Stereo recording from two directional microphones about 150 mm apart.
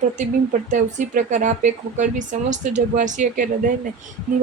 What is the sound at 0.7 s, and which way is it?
A woman's voice, 55° right (ahead or behind).